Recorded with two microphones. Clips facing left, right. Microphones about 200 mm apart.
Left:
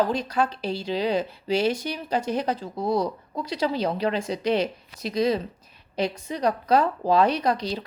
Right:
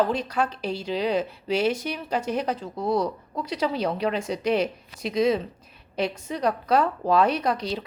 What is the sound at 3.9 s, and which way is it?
Speech, 30° left (ahead or behind).